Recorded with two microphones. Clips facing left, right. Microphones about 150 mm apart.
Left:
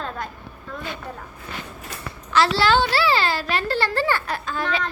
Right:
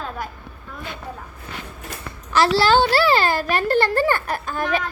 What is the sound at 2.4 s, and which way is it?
A child's voice, 40° right (ahead or behind).